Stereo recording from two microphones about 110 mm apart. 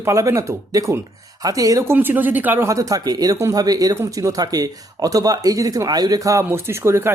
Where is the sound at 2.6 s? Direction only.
30° right (ahead or behind).